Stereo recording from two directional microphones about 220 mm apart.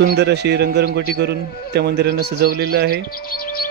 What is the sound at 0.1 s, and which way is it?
A man's voice, 50° right (ahead or behind).